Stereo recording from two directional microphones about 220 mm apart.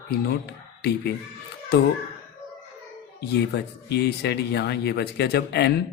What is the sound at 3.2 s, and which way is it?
Speech, 50° left (ahead or behind).